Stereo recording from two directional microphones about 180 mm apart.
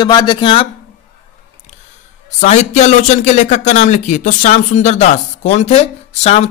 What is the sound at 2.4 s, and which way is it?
Speech, 40° left (ahead or behind).